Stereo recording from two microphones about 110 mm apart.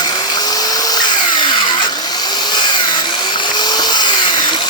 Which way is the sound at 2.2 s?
40° left (ahead or behind).